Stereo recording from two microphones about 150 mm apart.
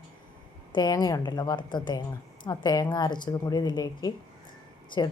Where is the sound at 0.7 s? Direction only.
30° left (ahead or behind).